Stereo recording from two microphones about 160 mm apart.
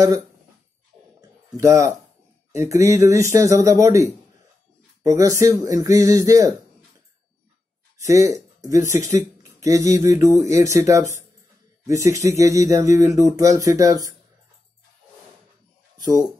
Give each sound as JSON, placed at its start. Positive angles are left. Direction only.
{"t": 1.6, "sound": "speech", "side_deg": -20}
{"t": 8.1, "sound": "speech", "side_deg": -20}